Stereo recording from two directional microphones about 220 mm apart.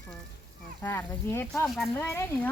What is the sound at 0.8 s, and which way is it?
Speech, 10° left (ahead or behind).